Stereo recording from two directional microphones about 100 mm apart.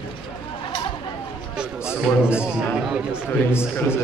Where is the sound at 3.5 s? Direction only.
25° left (ahead or behind).